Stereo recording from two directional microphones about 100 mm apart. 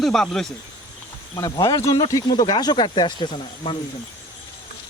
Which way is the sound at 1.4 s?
40° left (ahead or behind).